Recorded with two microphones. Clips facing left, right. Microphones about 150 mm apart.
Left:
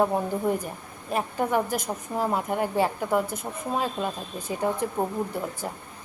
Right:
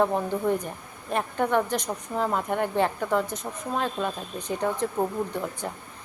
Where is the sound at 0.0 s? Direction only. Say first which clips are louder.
Even; 10° left (ahead or behind).